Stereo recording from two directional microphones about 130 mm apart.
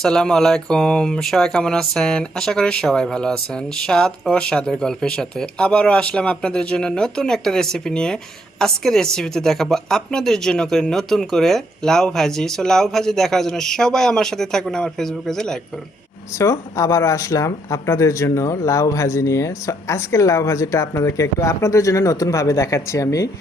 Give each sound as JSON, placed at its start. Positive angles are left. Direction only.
{"t": 0.0, "sound": "speech", "side_deg": 5}
{"t": 16.4, "sound": "speech", "side_deg": 25}